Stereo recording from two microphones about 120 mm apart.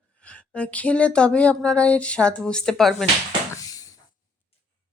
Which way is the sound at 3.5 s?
30° left (ahead or behind).